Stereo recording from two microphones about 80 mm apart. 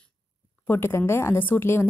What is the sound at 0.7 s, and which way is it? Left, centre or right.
A woman's voice, left.